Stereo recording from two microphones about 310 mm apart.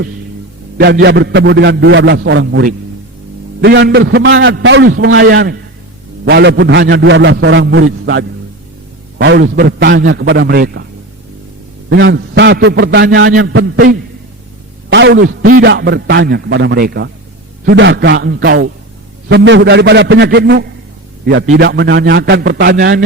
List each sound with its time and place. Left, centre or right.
0.8 s a man's voice: right
11.9 s a man's voice: right